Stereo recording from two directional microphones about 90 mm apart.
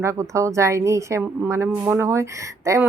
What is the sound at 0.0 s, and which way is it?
A woman's voice, 35° right (ahead or behind).